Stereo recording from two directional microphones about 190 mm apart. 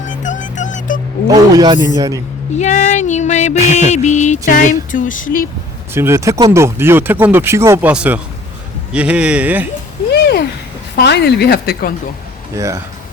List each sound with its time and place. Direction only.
0.0 s music: 40° left (ahead or behind)
1.3 s speech: 20° right (ahead or behind)
2.6 s female singing: 40° left (ahead or behind)
3.7 s music: 40° left (ahead or behind)
5.9 s speech: 15° right (ahead or behind)
10.1 s a sound: 60° left (ahead or behind)
10.9 s speech: 60° left (ahead or behind)
12.5 s speech: 15° right (ahead or behind)